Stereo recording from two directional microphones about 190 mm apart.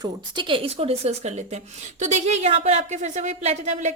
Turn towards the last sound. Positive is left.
turn(degrees=-40)  # may be behind; listen again after turning